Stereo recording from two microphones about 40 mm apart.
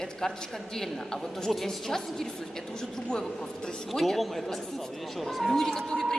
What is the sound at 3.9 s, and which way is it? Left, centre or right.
A man's voice, centre.